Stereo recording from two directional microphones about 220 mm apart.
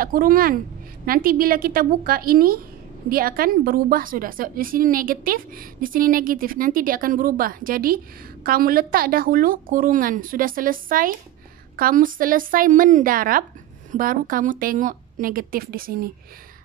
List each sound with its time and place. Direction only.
0.0 s a woman's voice: 40° right (ahead or behind)